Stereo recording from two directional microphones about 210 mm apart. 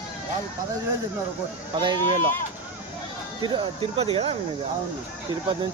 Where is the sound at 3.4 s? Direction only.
25° right (ahead or behind).